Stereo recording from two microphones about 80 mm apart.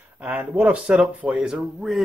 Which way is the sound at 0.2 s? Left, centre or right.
Centre.